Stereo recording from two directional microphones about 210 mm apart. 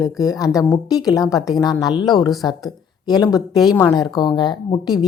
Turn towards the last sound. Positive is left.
turn(degrees=20)  # may be behind; listen again after turning